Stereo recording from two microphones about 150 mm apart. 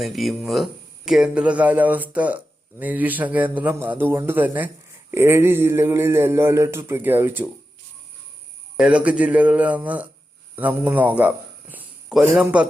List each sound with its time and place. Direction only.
0.0 s speech: centre (ahead or behind)
8.7 s a man's voice: 5° right (ahead or behind)